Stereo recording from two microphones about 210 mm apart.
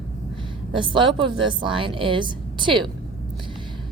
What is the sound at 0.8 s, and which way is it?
Speech, 25° right (ahead or behind).